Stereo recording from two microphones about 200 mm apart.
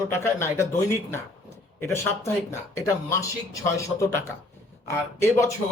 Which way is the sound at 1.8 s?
10° left (ahead or behind).